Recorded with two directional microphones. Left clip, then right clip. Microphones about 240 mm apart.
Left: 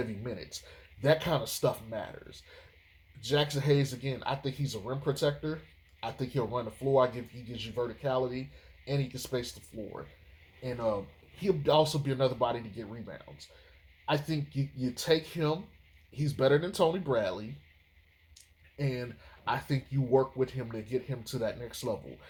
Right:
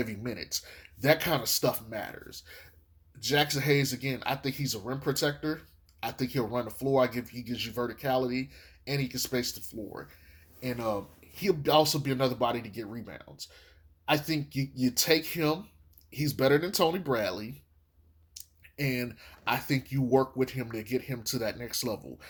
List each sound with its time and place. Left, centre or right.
0.0 s speech: right
11.3 s speech: right
18.4 s a sound: right
18.8 s speech: right